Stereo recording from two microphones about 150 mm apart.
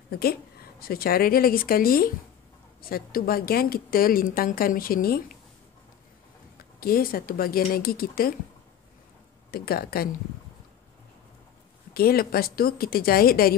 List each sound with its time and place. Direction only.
0.1 s a woman's voice: 90° left
6.8 s a woman's voice: 75° left (ahead or behind)
9.5 s speech: 90° left
11.9 s a woman's voice: 90° left